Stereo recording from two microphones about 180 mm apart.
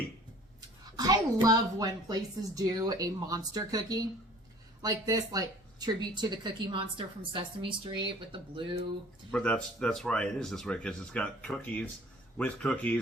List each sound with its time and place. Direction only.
0.9 s a woman's voice: 20° right (ahead or behind)
9.3 s a man's voice: 5° left (ahead or behind)